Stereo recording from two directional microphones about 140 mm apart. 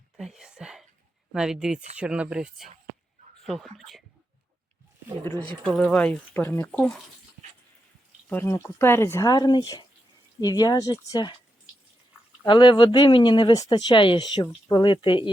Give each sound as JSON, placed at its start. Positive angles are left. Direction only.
{"t": 0.3, "sound": "whispering", "side_deg": -5}
{"t": 1.3, "sound": "speech", "side_deg": -5}
{"t": 5.4, "sound": "speech", "side_deg": 5}
{"t": 6.7, "sound": "speech", "side_deg": 5}
{"t": 8.3, "sound": "speech", "side_deg": 15}
{"t": 12.4, "sound": "speech", "side_deg": 35}